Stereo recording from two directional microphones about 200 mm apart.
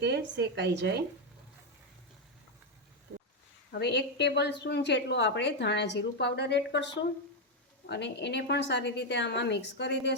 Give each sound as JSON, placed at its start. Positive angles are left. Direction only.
{"t": 0.0, "sound": "speech", "side_deg": -60}
{"t": 3.7, "sound": "a woman's voice", "side_deg": 60}